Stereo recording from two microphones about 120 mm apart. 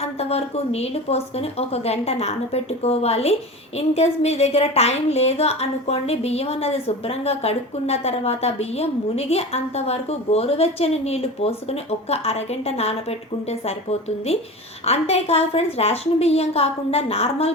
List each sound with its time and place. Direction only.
0.0 s a woman's voice: 60° left (ahead or behind)
14.8 s a woman's voice: 60° left (ahead or behind)